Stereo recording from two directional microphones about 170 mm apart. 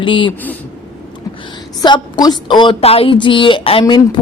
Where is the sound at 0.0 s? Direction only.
30° left (ahead or behind).